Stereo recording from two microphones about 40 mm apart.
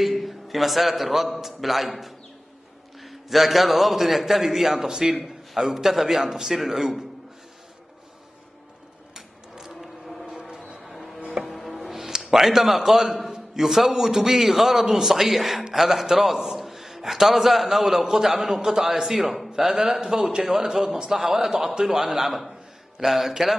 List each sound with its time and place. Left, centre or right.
0.0 s a man's voice: centre
5.1 s a man's voice: centre
9.1 s mechanisms: centre
10.2 s a sound: centre
10.8 s music: centre
11.9 s a man's voice: centre